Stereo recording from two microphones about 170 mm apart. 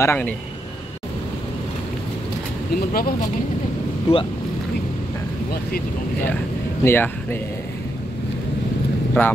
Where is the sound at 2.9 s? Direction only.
60° left (ahead or behind).